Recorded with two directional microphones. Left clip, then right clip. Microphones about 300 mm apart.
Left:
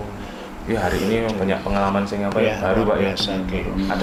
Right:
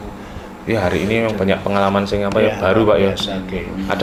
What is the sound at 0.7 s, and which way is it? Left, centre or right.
Speech, right.